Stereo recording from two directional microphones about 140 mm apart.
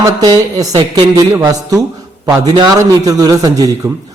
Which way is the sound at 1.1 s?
25° right (ahead or behind).